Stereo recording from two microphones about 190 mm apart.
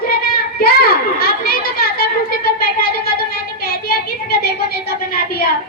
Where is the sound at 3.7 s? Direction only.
55° left (ahead or behind).